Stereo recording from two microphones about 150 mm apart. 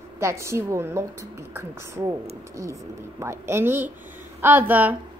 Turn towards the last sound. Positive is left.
turn(degrees=-10)  # may be behind; listen again after turning